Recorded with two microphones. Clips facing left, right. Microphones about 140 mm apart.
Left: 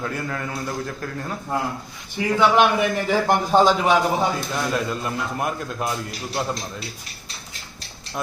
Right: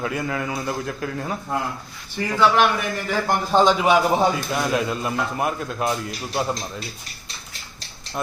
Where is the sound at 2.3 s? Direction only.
20° left (ahead or behind).